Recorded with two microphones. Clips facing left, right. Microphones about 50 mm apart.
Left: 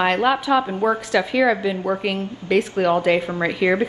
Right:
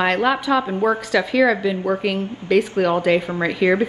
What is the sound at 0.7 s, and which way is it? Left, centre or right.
Speech, centre.